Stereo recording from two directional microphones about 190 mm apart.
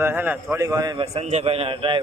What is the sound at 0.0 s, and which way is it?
A man's voice, 10° right (ahead or behind).